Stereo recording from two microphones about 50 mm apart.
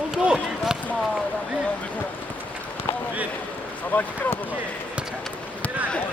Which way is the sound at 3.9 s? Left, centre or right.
Left.